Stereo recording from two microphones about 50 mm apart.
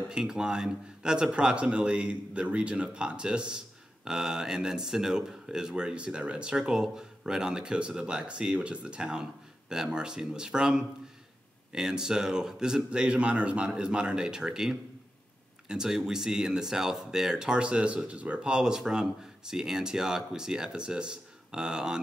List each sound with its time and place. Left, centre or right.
0.1 s a man's voice: centre